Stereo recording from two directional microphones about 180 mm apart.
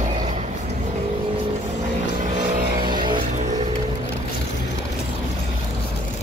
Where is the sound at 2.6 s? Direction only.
55° right (ahead or behind).